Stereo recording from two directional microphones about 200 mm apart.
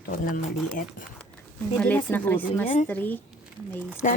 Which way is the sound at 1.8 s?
10° left (ahead or behind).